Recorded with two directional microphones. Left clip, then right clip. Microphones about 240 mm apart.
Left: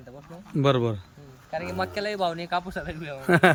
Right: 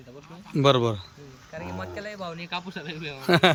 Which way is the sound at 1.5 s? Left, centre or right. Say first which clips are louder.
Left 7 dB; left.